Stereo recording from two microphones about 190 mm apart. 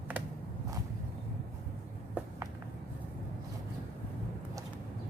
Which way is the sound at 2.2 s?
5° right (ahead or behind).